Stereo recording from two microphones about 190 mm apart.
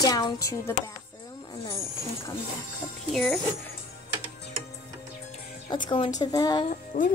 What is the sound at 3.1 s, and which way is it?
Speech, centre (ahead or behind).